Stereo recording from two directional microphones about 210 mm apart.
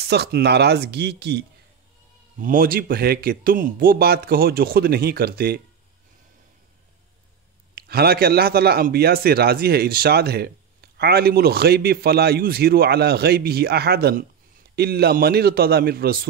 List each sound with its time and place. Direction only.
0.0 s speech: 50° right (ahead or behind)
2.3 s speech: 40° right (ahead or behind)
7.7 s speech: 50° right (ahead or behind)